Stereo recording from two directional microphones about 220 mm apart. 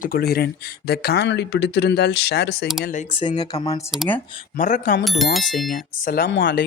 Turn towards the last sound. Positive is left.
turn(degrees=55)  # may be behind; listen again after turning